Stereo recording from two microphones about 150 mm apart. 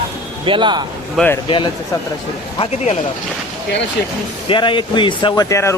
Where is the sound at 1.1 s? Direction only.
15° left (ahead or behind).